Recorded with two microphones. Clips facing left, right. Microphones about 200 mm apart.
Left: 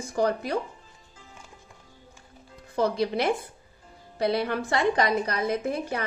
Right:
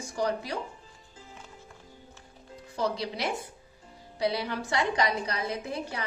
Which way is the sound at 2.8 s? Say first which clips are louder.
Left 6 dB; 55° left (ahead or behind).